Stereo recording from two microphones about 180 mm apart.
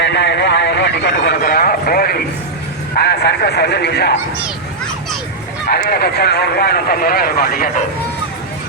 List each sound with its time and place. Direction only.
0.0 s speech: 75° left (ahead or behind)
5.6 s speech: 60° left (ahead or behind)